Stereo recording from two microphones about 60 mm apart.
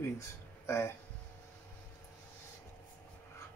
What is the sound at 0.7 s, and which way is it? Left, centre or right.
Speech, left.